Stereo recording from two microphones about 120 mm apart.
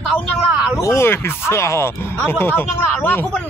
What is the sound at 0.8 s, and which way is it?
Speech, 25° left (ahead or behind).